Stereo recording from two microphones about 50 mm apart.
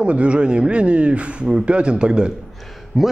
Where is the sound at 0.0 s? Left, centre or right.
Right.